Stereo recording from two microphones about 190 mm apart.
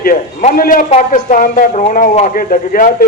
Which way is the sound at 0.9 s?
40° left (ahead or behind).